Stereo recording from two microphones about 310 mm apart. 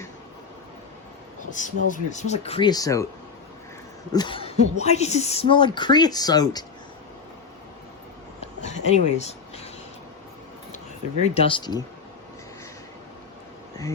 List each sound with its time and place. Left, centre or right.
1.5 s speech: left
4.1 s speech: centre
8.6 s speech: left
11.3 s speech: centre